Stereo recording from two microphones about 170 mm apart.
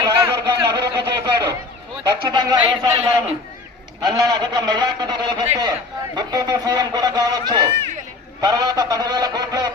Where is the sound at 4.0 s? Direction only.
25° right (ahead or behind).